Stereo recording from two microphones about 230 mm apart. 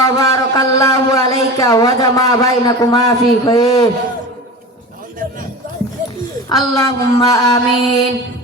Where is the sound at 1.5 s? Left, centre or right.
Centre.